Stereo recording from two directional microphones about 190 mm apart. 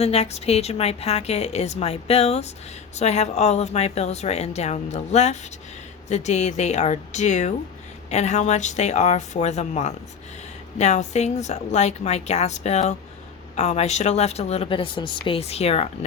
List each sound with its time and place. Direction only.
0.0 s a woman's voice: 35° left (ahead or behind)